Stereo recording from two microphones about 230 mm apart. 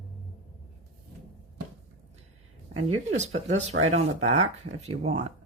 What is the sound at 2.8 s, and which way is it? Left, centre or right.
Speech, right.